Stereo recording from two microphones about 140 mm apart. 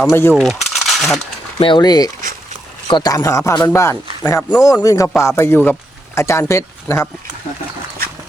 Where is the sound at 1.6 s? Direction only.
35° left (ahead or behind).